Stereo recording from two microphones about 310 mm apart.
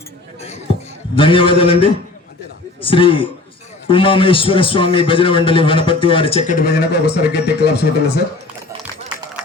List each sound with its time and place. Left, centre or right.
1.1 s a man's voice: centre; by 8.2 s left